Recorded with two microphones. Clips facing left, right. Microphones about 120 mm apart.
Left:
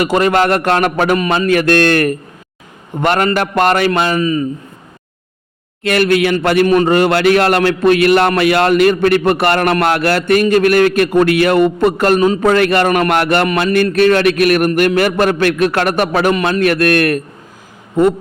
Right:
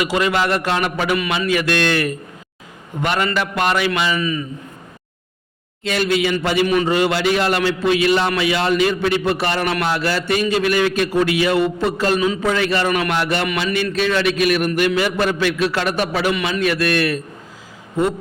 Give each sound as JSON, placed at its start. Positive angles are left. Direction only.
{"t": 0.0, "sound": "a man's voice", "side_deg": 50}
{"t": 5.8, "sound": "a man's voice", "side_deg": 60}
{"t": 13.5, "sound": "a sound", "side_deg": 45}
{"t": 13.9, "sound": "a man's voice", "side_deg": 55}